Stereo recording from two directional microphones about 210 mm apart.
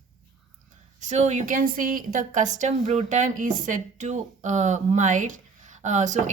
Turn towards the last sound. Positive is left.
turn(degrees=-35)  # may be behind; listen again after turning